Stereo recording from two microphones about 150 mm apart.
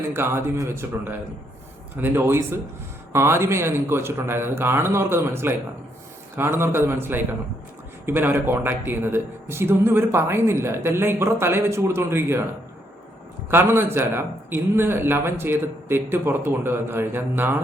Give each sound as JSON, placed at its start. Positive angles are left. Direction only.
{"t": 0.1, "sound": "speech", "side_deg": -15}
{"t": 13.5, "sound": "speech", "side_deg": -15}